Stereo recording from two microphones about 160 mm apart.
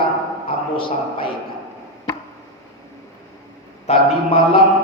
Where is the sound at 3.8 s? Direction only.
40° left (ahead or behind).